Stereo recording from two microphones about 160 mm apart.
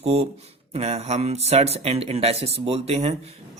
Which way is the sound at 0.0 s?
40° right (ahead or behind).